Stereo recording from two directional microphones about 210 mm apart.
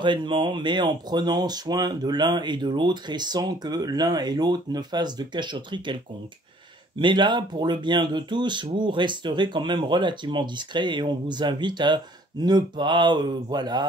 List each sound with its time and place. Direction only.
0.0 s speech: 20° right (ahead or behind)
7.0 s speech: 20° right (ahead or behind)